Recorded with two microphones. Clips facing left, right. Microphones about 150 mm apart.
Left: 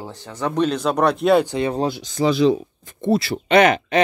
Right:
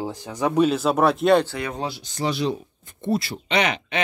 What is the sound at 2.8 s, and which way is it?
Speech, 90° left.